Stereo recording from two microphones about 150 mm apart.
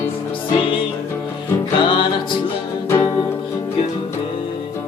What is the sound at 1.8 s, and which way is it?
Music, 30° left (ahead or behind).